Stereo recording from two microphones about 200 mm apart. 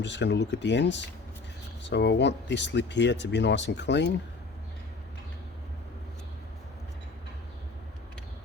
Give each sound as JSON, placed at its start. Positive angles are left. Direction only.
{"t": 0.0, "sound": "speech", "side_deg": 60}